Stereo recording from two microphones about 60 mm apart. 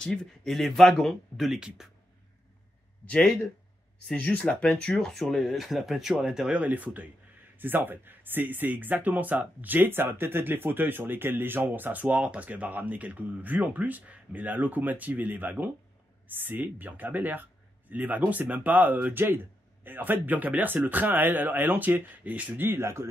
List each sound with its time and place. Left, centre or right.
0.0 s speech: centre
4.1 s speech: left; by 6.6 s centre
6.6 s speech: right
22.6 s speech: right